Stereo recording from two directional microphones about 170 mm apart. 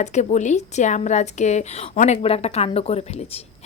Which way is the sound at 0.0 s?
40° left (ahead or behind).